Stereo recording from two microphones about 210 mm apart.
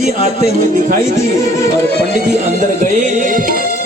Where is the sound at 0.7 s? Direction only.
40° right (ahead or behind).